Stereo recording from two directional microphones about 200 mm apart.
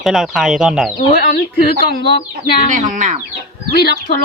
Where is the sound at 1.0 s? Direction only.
45° left (ahead or behind).